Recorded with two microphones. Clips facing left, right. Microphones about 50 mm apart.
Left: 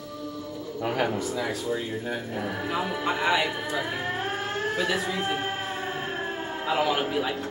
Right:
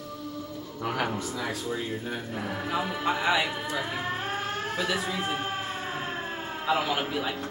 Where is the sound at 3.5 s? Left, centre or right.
Centre.